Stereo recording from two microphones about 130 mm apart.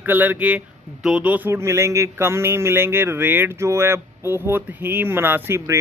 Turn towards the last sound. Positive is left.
turn(degrees=-20)  # may be behind; listen again after turning